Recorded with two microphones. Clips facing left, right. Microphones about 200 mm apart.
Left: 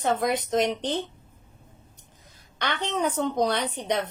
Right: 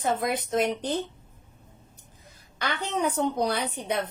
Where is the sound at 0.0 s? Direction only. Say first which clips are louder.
Left 2 dB; 5° right (ahead or behind).